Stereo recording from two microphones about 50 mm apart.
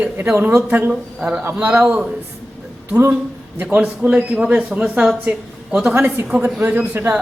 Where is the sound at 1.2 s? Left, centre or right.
Centre.